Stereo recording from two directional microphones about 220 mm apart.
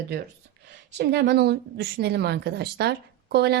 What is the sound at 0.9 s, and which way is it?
A woman's voice, 50° right (ahead or behind).